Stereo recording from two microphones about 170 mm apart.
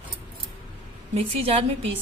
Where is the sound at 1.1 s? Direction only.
35° right (ahead or behind).